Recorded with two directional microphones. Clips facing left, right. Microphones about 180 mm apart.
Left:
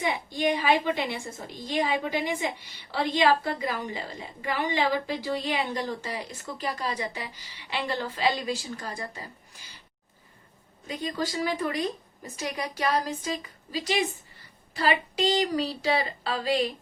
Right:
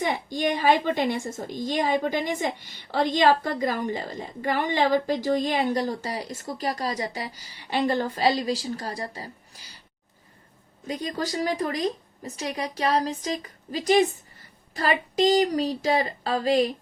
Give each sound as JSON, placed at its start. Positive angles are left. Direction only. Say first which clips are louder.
{"t": 0.4, "sound": "a woman's voice", "louder": "right 2 dB", "side_deg": -50}
{"t": 10.8, "sound": "a woman's voice", "louder": "right 2 dB", "side_deg": -40}